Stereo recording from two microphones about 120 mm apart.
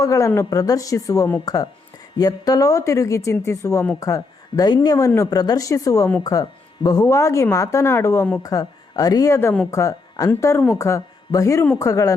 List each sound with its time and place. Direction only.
0.0 s speech: 25° left (ahead or behind)